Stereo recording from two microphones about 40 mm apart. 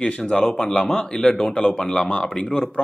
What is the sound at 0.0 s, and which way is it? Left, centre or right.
Speech, left.